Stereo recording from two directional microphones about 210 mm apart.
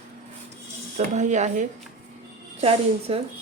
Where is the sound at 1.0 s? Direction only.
35° right (ahead or behind).